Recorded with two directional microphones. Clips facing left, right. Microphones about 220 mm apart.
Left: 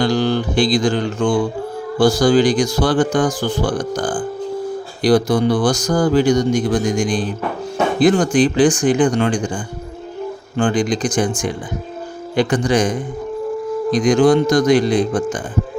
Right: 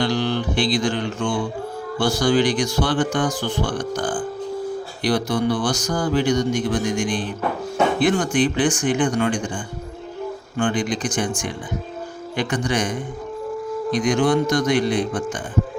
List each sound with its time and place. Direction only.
0.0 s music: 40° left (ahead or behind)
2.0 s speech: 35° left (ahead or behind)
10.6 s speech: 35° left (ahead or behind)
12.4 s speech: 35° left (ahead or behind)
14.1 s speech: 35° left (ahead or behind)
14.8 s speech: 90° left